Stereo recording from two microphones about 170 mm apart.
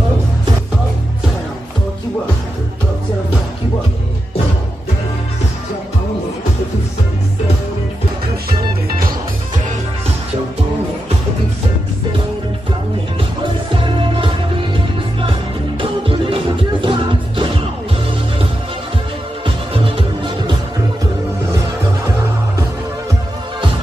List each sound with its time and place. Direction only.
13.7 s music: 30° right (ahead or behind)
15.8 s music: 30° right (ahead or behind)
19.4 s music: 30° right (ahead or behind)